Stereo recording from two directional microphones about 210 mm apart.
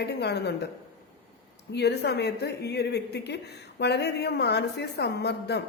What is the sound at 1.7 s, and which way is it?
A woman's voice, 55° left (ahead or behind).